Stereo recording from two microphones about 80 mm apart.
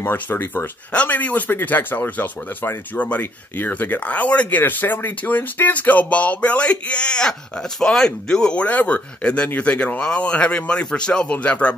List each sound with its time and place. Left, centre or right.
0.0 s a man's voice: left